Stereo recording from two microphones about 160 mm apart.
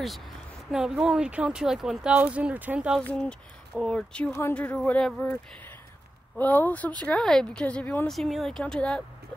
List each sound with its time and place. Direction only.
0.7 s speech: 5° right (ahead or behind)
3.0 s speech: 5° left (ahead or behind)
4.3 s speech: 15° left (ahead or behind)
6.3 s speech: 10° left (ahead or behind)